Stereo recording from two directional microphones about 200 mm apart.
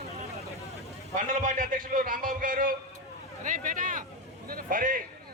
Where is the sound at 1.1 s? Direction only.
40° right (ahead or behind).